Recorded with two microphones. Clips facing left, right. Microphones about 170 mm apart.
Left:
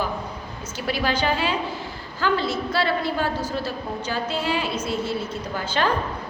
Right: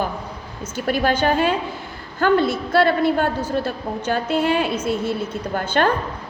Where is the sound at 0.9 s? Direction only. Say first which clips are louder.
Right 5 dB; 50° right (ahead or behind).